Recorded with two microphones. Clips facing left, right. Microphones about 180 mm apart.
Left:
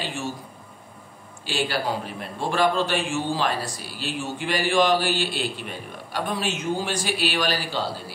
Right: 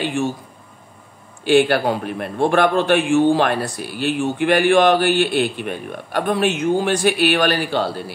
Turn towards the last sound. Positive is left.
turn(degrees=-60)  # may be behind; listen again after turning